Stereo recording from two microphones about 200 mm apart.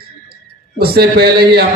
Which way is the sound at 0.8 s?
55° right (ahead or behind).